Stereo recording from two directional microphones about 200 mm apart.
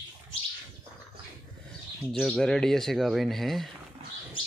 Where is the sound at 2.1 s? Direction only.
Centre (ahead or behind).